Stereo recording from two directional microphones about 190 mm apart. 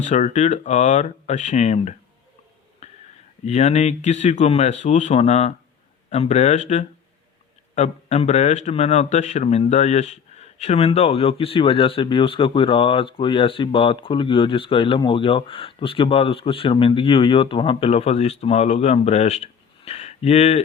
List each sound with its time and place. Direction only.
0.0 s speech: 40° left (ahead or behind)
2.8 s a sound: 35° left (ahead or behind)
3.4 s speech: 35° left (ahead or behind)